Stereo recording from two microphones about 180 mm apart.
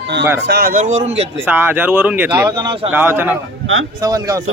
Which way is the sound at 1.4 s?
10° right (ahead or behind).